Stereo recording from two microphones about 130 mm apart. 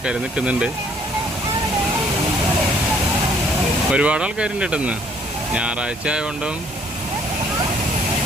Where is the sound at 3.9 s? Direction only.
5° right (ahead or behind).